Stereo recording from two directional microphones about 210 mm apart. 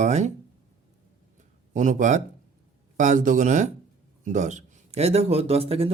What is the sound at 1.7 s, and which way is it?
Speech, 35° right (ahead or behind).